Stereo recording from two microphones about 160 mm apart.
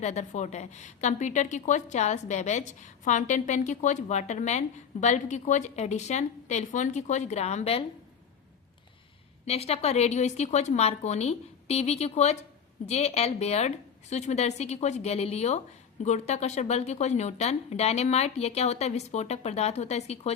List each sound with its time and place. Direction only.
0.0 s a woman's voice: 45° left (ahead or behind)
9.5 s a woman's voice: 40° left (ahead or behind)